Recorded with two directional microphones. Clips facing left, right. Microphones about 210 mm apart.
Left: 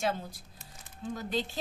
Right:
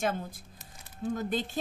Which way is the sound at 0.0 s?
50° right (ahead or behind).